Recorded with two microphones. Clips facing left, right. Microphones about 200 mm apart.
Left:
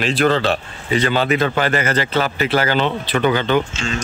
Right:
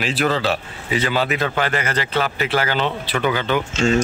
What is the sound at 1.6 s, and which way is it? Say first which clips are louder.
Speech: left 3 dB; 40° left (ahead or behind).